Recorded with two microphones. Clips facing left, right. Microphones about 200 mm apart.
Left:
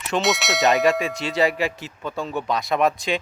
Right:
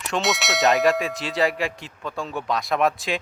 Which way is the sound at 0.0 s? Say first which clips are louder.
Left 2 dB; centre (ahead or behind).